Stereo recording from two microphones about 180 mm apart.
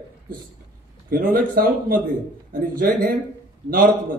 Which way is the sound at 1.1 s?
55° right (ahead or behind).